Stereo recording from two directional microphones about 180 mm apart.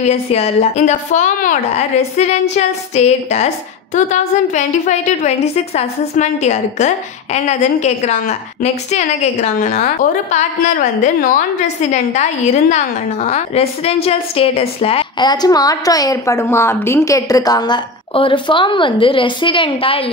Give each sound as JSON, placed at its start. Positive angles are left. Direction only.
{"t": 0.0, "sound": "a woman's voice", "side_deg": 35}
{"t": 4.6, "sound": "a woman's voice", "side_deg": 40}